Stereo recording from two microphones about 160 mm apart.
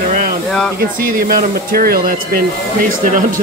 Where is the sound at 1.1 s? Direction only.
60° right (ahead or behind).